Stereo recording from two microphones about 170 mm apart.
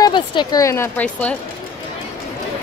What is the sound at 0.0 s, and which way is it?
Speech, 30° left (ahead or behind).